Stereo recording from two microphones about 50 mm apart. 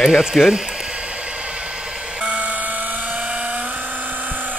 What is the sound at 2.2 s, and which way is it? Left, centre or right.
Vehicle, right.